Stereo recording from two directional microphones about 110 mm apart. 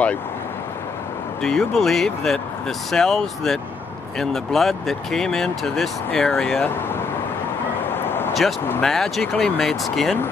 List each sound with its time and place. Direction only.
1.4 s speech: 5° left (ahead or behind)
7.9 s a sound: 20° left (ahead or behind)
8.8 s speech: 5° left (ahead or behind)